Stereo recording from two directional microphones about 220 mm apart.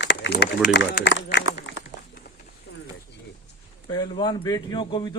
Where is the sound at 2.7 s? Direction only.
50° left (ahead or behind).